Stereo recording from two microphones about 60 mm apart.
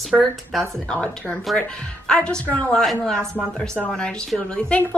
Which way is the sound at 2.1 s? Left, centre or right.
Centre.